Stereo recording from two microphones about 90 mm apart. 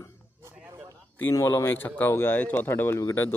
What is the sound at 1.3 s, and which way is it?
A man's voice, 35° left (ahead or behind).